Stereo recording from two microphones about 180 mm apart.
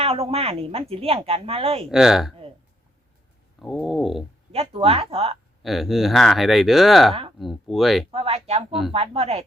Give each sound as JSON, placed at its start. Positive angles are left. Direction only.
{"t": 0.0, "sound": "speech", "side_deg": -35}
{"t": 1.9, "sound": "speech", "side_deg": -5}
{"t": 3.6, "sound": "speech", "side_deg": 0}
{"t": 4.5, "sound": "speech", "side_deg": -30}
{"t": 5.6, "sound": "speech", "side_deg": 0}
{"t": 8.1, "sound": "speech", "side_deg": -35}